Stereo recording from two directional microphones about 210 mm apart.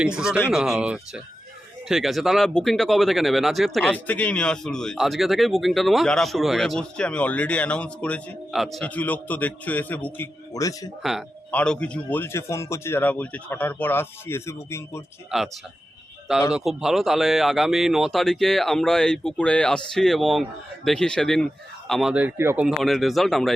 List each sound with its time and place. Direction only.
0.0 s speech: 5° right (ahead or behind); by 10.8 s 15° left (ahead or behind)
11.0 s speech: centre (ahead or behind)
15.3 s speech: centre (ahead or behind)
16.5 s speech: 5° right (ahead or behind)